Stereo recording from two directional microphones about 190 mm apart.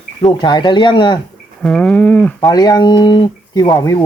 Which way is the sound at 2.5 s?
20° left (ahead or behind).